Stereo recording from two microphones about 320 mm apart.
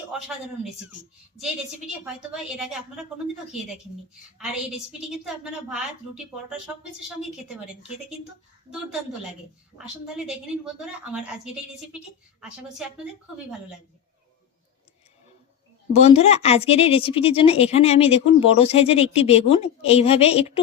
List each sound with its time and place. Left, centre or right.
2.3 s a woman's voice: centre
4.4 s a woman's voice: centre
10.8 s a woman's voice: centre
15.9 s a woman's voice: centre